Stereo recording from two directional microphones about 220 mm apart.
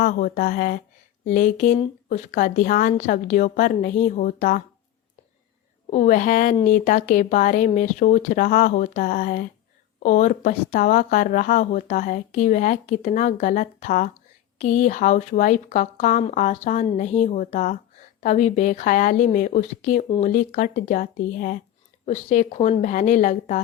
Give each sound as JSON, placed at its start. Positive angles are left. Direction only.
{"t": 0.0, "sound": "speech", "side_deg": 40}
{"t": 5.9, "sound": "speech", "side_deg": 35}